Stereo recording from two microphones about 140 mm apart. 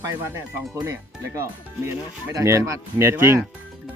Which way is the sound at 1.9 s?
20° right (ahead or behind).